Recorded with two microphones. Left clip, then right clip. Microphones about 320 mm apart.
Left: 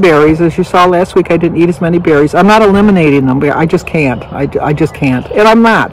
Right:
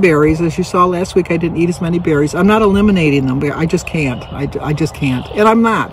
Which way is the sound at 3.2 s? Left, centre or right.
Centre.